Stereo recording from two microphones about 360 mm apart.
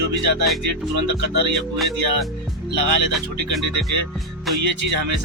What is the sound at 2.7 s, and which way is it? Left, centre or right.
Speech, right.